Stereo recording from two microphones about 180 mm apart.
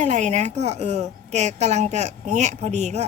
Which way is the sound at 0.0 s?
40° right (ahead or behind).